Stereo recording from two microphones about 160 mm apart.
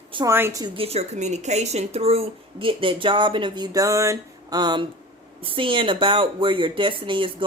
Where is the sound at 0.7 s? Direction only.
40° right (ahead or behind).